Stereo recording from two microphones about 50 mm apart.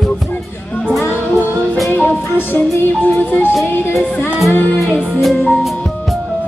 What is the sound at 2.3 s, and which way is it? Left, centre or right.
Music, left.